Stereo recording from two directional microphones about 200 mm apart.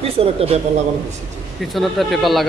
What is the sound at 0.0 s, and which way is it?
Speech, 30° right (ahead or behind).